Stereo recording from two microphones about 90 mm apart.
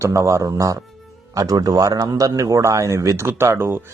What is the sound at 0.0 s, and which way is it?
Speech, 35° right (ahead or behind).